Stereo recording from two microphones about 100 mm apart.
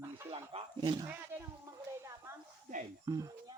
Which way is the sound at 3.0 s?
35° right (ahead or behind).